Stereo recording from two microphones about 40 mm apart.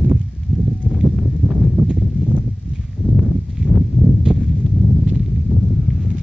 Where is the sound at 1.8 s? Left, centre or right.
Centre.